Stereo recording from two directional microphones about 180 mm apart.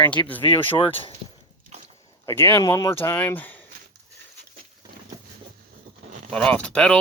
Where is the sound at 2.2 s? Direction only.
15° left (ahead or behind).